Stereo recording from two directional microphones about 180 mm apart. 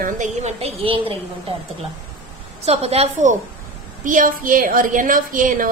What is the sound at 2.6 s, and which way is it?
Speech, 35° right (ahead or behind).